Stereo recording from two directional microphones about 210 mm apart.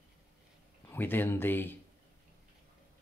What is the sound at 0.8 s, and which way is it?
Speech, 10° left (ahead or behind).